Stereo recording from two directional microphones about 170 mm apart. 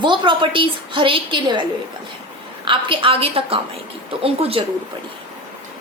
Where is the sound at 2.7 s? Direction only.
30° right (ahead or behind).